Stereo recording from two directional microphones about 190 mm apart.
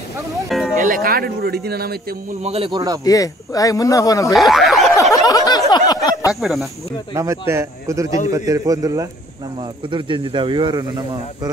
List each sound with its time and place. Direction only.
0.5 s music: centre (ahead or behind)
0.7 s speech: 45° right (ahead or behind)
2.4 s speech: 30° right (ahead or behind)
3.1 s speech: 20° left (ahead or behind)
4.3 s speech: centre (ahead or behind)
5.1 s a sound: 20° left (ahead or behind)
6.4 s speech: centre (ahead or behind)
7.2 s speech: 15° right (ahead or behind)